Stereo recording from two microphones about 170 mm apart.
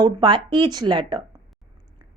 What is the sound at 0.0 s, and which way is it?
A woman's voice, 25° right (ahead or behind).